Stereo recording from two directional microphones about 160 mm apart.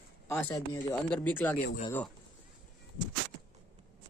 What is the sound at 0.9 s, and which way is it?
Speech, 10° left (ahead or behind).